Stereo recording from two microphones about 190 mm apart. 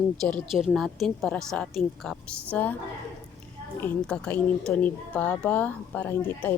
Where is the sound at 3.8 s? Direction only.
5° left (ahead or behind).